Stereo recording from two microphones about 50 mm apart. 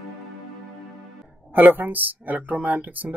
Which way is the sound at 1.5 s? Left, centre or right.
Right.